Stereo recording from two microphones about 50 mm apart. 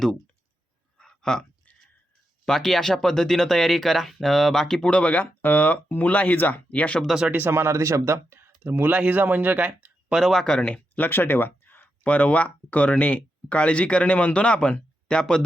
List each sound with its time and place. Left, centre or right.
0.9 s a sound: centre
2.5 s speech: centre
4.9 s speech: left
7.4 s speech: right
8.9 s speech: right
10.1 s speech: centre
10.3 s speech: centre
10.6 s speech: left; by 15.4 s centre